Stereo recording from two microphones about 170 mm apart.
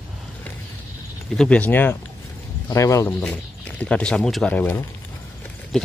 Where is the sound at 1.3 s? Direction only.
5° left (ahead or behind).